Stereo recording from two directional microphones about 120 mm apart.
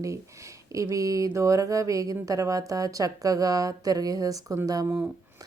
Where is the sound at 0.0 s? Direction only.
25° right (ahead or behind).